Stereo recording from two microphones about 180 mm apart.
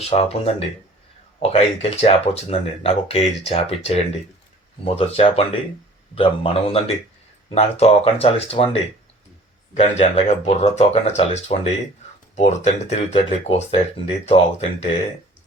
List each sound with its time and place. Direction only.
0.0 s speech: 35° left (ahead or behind)